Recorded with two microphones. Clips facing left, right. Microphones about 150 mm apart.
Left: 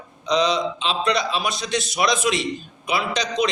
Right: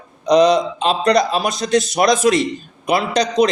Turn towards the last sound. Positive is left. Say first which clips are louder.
# right 7 dB
turn(degrees=-40)  # may be behind; listen again after turning